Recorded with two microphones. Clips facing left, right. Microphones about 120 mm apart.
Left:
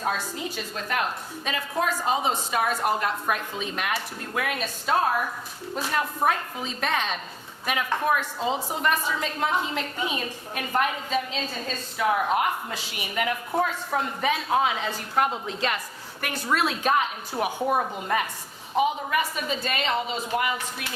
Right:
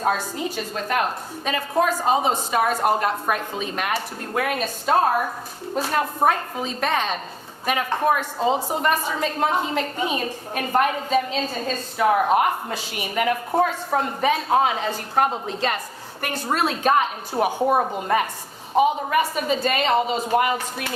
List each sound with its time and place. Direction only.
0.0 s a woman's voice: 40° right (ahead or behind)